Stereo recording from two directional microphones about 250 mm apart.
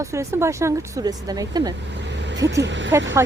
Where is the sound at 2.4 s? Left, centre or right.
Right.